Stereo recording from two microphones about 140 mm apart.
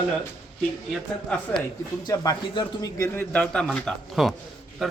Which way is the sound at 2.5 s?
35° left (ahead or behind).